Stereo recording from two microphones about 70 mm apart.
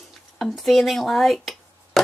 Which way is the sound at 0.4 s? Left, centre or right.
Centre.